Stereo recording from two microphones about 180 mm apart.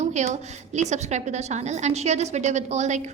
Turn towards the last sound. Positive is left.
turn(degrees=-40)  # may be behind; listen again after turning